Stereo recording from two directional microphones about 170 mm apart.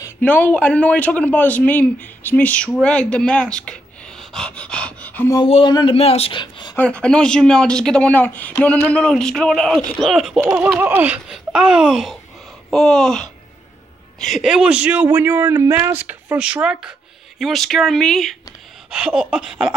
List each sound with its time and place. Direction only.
0.2 s a man's voice: 10° left (ahead or behind)
5.4 s speech: 30° left (ahead or behind)
6.7 s speech: 5° left (ahead or behind)